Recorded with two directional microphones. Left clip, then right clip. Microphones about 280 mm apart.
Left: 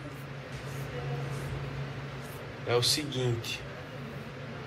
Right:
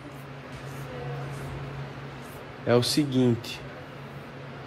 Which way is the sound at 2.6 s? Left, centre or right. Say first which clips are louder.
Right 4 dB; right.